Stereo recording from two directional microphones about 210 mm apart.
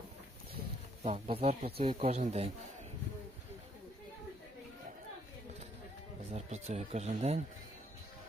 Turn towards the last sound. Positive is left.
turn(degrees=-30)  # may be behind; listen again after turning